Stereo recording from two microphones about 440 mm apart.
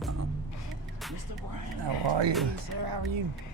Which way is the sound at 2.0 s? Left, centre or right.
Right.